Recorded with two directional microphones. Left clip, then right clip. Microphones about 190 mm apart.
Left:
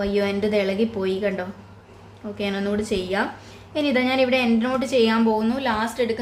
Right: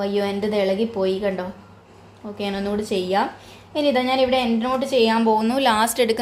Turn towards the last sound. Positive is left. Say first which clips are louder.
# right 5 dB
turn(degrees=-40)  # may be behind; listen again after turning